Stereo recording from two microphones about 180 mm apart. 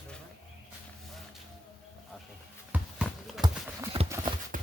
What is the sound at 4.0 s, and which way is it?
Clip-clop, 30° right (ahead or behind).